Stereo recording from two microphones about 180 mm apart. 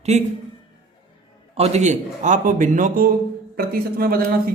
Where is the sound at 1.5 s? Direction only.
35° right (ahead or behind).